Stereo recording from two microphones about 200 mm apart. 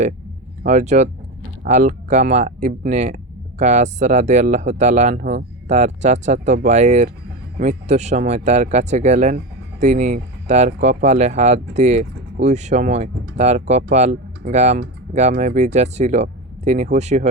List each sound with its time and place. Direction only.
0.6 s speech: 35° right (ahead or behind)